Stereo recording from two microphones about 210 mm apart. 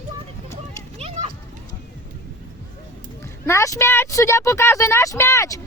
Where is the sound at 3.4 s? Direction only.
15° left (ahead or behind).